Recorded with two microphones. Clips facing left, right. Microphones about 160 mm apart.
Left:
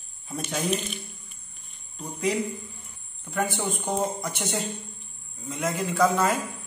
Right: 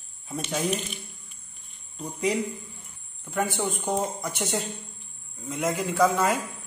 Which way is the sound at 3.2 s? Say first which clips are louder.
Right 1 dB; centre (ahead or behind).